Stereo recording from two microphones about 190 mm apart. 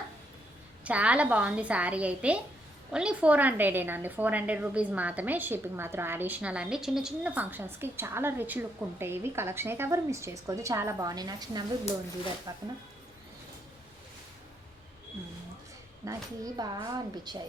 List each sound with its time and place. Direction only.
0.9 s a woman's voice: 5° right (ahead or behind)
16.0 s a woman's voice: 20° right (ahead or behind)